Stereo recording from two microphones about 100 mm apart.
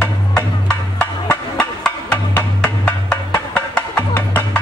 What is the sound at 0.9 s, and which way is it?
Music, 10° left (ahead or behind).